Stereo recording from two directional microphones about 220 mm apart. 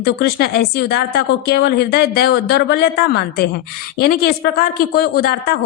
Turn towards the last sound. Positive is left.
turn(degrees=45)  # may be behind; listen again after turning